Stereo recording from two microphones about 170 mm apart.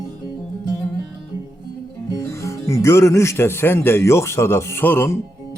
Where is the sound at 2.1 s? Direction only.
15° left (ahead or behind).